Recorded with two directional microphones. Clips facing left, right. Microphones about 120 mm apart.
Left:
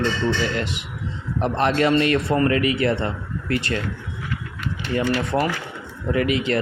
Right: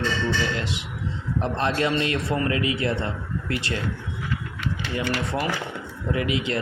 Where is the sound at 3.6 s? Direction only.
55° left (ahead or behind).